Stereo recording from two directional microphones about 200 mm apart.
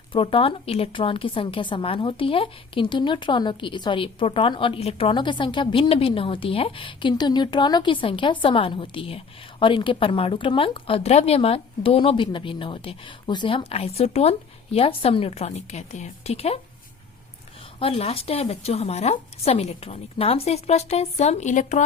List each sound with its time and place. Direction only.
0.1 s a woman's voice: 25° left (ahead or behind)
17.7 s speech: 30° left (ahead or behind)